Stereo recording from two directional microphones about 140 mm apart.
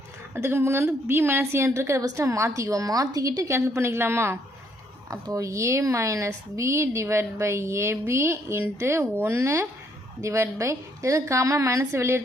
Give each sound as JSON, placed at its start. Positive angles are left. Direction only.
{"t": 0.3, "sound": "a woman's voice", "side_deg": -20}